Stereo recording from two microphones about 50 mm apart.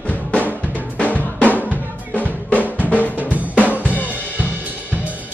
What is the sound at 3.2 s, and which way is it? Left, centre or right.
Drum, right.